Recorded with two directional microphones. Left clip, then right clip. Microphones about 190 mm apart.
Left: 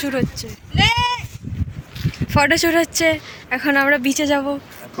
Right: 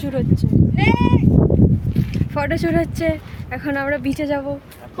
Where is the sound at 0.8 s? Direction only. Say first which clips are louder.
Left 4 dB; 10° right (ahead or behind).